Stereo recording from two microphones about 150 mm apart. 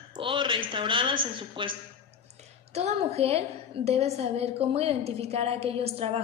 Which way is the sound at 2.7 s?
45° right (ahead or behind).